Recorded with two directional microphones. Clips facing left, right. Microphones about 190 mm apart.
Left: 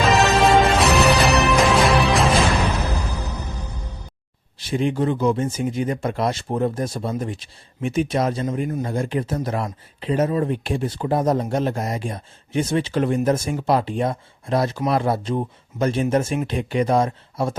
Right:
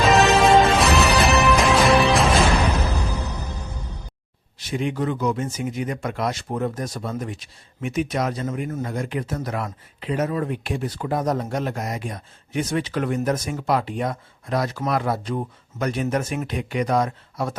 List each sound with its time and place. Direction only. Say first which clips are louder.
0.0 s music: right 1 dB; centre (ahead or behind)
4.5 s speech: left 4 dB; 30° left (ahead or behind)